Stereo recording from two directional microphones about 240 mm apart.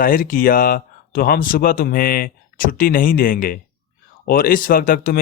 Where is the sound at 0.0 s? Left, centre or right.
Left.